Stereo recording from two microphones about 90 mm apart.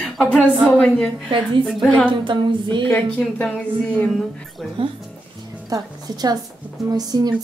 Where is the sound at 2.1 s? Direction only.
65° right (ahead or behind).